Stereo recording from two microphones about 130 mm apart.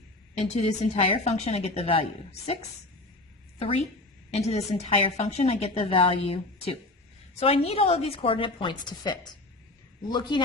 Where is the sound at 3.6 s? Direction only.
50° left (ahead or behind).